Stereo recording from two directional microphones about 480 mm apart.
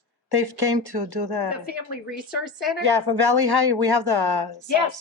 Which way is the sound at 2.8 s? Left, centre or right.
Right.